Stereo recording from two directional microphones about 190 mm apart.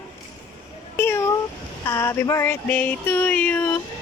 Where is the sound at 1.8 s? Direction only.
15° left (ahead or behind).